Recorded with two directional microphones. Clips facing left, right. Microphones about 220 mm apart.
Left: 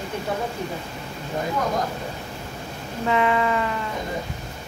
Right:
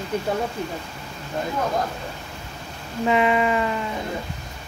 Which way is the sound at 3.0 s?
15° right (ahead or behind).